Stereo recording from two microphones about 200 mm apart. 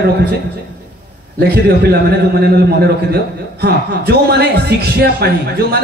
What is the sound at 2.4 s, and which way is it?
Speech, 55° right (ahead or behind).